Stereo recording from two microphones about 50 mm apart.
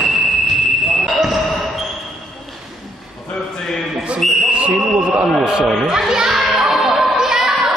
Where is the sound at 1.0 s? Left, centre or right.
Centre.